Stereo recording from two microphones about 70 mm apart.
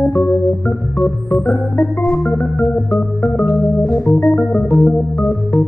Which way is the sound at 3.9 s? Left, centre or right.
Centre.